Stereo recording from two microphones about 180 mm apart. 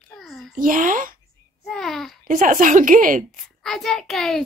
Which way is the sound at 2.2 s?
50° right (ahead or behind).